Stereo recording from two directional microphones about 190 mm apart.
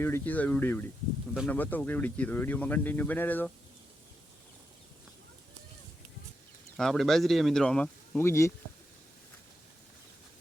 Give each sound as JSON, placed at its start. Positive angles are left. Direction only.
{"t": 0.0, "sound": "speech", "side_deg": 10}
{"t": 6.7, "sound": "speech", "side_deg": 0}